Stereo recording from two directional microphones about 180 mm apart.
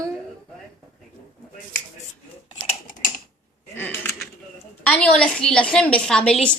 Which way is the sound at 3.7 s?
10° left (ahead or behind).